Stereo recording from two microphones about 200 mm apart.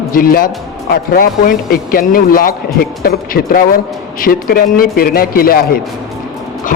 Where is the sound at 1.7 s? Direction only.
45° left (ahead or behind).